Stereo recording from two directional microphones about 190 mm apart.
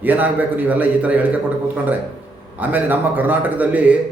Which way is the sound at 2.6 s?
10° right (ahead or behind).